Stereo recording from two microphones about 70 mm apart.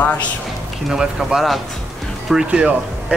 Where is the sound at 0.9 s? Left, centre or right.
Centre.